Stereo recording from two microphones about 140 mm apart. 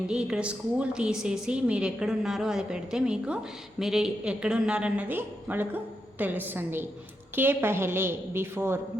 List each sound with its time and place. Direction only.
0.1 s a woman's voice: 5° right (ahead or behind)